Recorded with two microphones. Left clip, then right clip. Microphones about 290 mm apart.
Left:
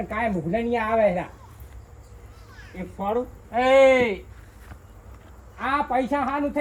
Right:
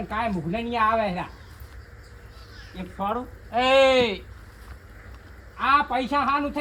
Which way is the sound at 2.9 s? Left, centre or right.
Centre.